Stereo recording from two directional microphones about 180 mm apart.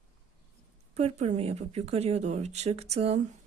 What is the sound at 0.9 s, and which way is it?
A woman's voice, 40° right (ahead or behind).